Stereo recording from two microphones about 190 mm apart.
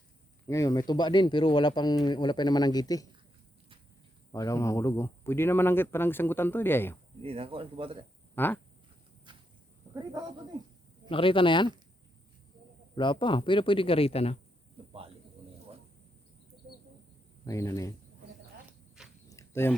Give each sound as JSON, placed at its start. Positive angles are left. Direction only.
{"t": 0.4, "sound": "speech", "side_deg": 15}
{"t": 4.3, "sound": "speech", "side_deg": 15}
{"t": 7.2, "sound": "speech", "side_deg": -30}
{"t": 8.4, "sound": "speech", "side_deg": 10}
{"t": 9.9, "sound": "speech", "side_deg": -20}
{"t": 11.1, "sound": "speech", "side_deg": 25}
{"t": 13.0, "sound": "speech", "side_deg": 25}
{"t": 17.4, "sound": "speech", "side_deg": 15}
{"t": 19.0, "sound": "a sound", "side_deg": -5}
{"t": 19.3, "sound": "a sound", "side_deg": 15}